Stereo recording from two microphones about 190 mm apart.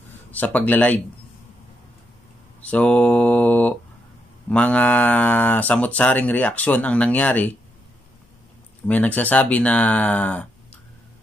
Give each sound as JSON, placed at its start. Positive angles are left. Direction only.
{"t": 0.3, "sound": "speech", "side_deg": 10}
{"t": 2.6, "sound": "speech", "side_deg": 5}
{"t": 8.8, "sound": "speech", "side_deg": 10}